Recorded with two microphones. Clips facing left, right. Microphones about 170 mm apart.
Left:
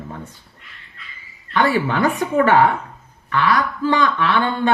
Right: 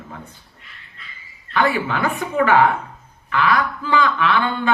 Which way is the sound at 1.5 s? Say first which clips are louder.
Left 2 dB; 35° left (ahead or behind).